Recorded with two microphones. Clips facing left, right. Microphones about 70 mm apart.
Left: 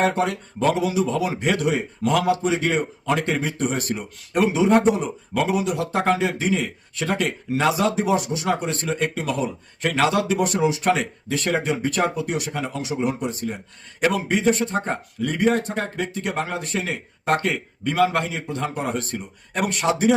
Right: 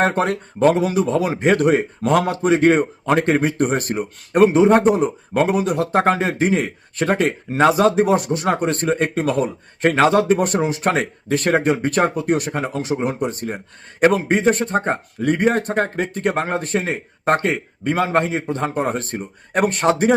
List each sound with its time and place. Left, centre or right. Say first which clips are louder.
0.0 s a man's voice: right 3 dB; right